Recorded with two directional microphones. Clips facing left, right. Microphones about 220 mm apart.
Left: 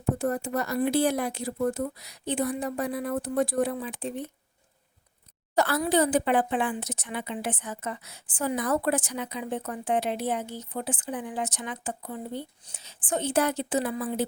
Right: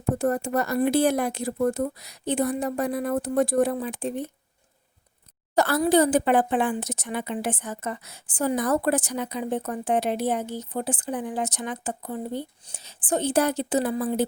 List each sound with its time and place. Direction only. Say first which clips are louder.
0.2 s speech: right 4 dB; 45° right (ahead or behind)
5.5 s a woman's voice: right 4 dB; 40° right (ahead or behind)